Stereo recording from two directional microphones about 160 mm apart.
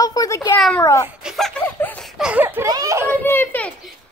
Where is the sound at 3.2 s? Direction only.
10° left (ahead or behind).